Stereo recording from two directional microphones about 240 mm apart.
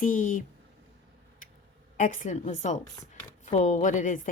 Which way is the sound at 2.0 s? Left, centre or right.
Left.